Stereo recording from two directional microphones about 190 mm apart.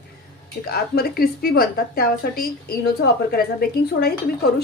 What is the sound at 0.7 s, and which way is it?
A woman's voice, 55° left (ahead or behind).